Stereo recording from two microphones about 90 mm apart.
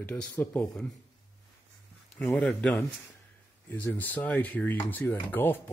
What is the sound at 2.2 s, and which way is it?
Speech, 15° left (ahead or behind).